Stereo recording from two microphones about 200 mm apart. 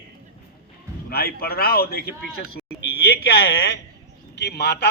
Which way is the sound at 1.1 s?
50° left (ahead or behind).